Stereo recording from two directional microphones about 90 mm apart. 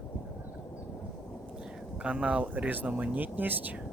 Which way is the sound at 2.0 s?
15° right (ahead or behind).